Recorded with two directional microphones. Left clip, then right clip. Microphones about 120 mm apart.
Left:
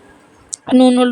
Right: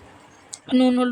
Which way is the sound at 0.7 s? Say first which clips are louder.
Left 8 dB; 50° left (ahead or behind).